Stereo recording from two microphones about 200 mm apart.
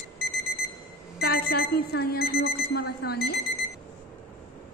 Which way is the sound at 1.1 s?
50° left (ahead or behind).